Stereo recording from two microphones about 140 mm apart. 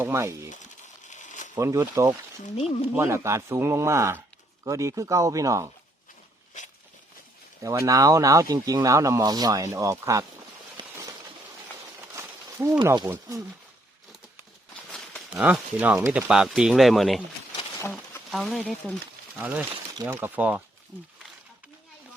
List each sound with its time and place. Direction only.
0.0 s speech: 20° right (ahead or behind)
0.5 s crumpling: 60° left (ahead or behind)
1.5 s speech: 20° right (ahead or behind)
2.4 s speech: 45° left (ahead or behind)
2.9 s speech: 20° right (ahead or behind)
7.6 s speech: 20° right (ahead or behind)
10.8 s a sound: 30° right (ahead or behind)
12.1 s a sound: 20° right (ahead or behind)
13.1 s speech: 25° right (ahead or behind)
15.3 s speech: 10° right (ahead or behind)
17.6 s insect: 20° left (ahead or behind)
18.3 s speech: centre (ahead or behind)
19.4 s speech: 10° right (ahead or behind)